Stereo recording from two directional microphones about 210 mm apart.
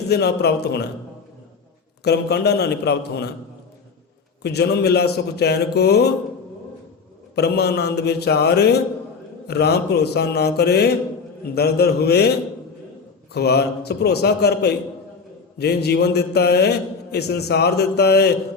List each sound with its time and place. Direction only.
0.1 s a man's voice: 50° left (ahead or behind)
2.0 s a man's voice: 50° left (ahead or behind)
4.4 s a man's voice: 50° left (ahead or behind)
7.3 s a man's voice: 50° left (ahead or behind)
13.3 s a man's voice: 50° left (ahead or behind)